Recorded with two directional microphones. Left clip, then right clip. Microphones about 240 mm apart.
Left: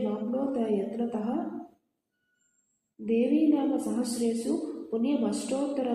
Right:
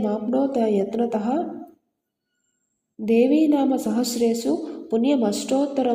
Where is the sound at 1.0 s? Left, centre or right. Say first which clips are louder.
Right 9 dB; right.